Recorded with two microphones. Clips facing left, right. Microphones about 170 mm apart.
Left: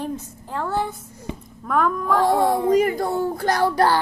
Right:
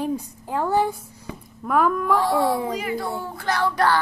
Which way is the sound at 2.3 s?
50° left (ahead or behind).